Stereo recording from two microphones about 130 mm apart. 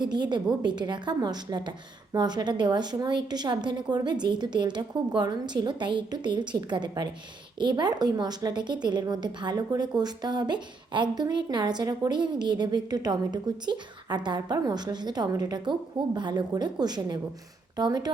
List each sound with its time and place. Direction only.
0.0 s a woman's voice: 35° right (ahead or behind)